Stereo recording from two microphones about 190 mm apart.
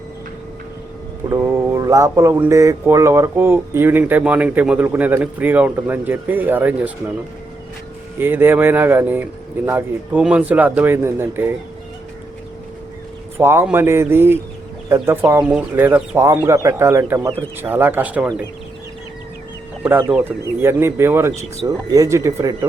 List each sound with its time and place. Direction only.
1.3 s mantra: 15° right (ahead or behind)
8.2 s mantra: 10° right (ahead or behind)
13.4 s mantra: 15° right (ahead or behind)
20.1 s mantra: 10° right (ahead or behind)